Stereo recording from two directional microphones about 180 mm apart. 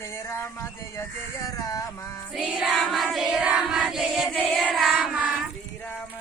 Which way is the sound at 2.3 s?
Centre (ahead or behind).